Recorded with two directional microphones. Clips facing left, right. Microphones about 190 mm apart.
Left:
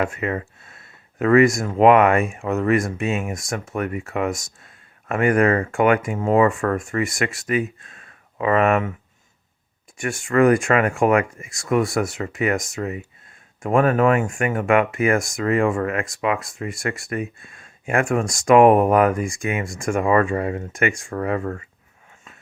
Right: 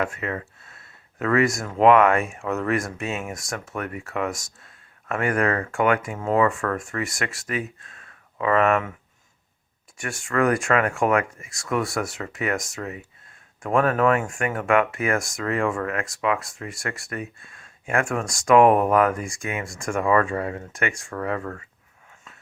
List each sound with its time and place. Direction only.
0.0 s speech: 15° left (ahead or behind)
10.0 s speech: 10° left (ahead or behind)